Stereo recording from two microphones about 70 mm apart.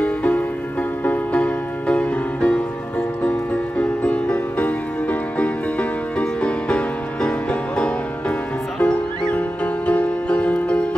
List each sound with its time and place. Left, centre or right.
0.0 s music: left